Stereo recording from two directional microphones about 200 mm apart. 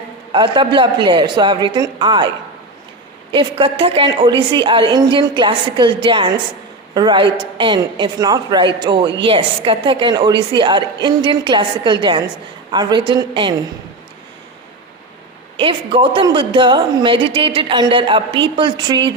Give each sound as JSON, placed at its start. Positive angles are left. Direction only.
{"t": 0.3, "sound": "a woman's voice", "side_deg": -25}
{"t": 3.3, "sound": "a woman's voice", "side_deg": -25}
{"t": 15.5, "sound": "a woman's voice", "side_deg": -25}